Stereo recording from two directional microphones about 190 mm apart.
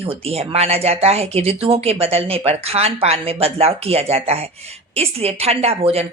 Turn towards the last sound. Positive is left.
turn(degrees=-30)  # may be behind; listen again after turning